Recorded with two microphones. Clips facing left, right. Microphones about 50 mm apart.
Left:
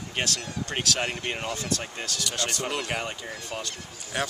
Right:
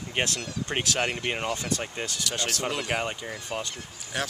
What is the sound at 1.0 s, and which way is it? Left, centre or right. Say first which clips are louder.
Speech: right 2 dB; centre.